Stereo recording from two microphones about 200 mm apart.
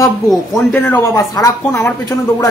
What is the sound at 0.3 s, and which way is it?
Speech, centre (ahead or behind).